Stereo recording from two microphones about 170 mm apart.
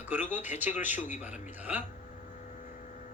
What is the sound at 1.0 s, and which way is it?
Speech, 45° left (ahead or behind).